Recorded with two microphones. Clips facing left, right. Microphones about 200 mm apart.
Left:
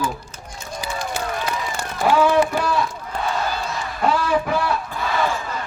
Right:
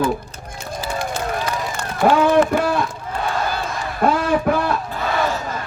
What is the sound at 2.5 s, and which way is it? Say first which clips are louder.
Run: right 3 dB; 50° right (ahead or behind).